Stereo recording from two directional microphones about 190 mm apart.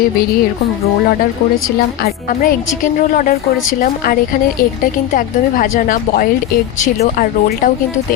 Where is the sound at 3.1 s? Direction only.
45° left (ahead or behind).